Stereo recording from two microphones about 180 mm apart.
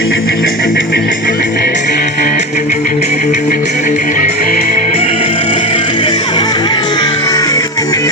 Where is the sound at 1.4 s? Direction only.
65° left (ahead or behind); by 4.3 s 45° left (ahead or behind).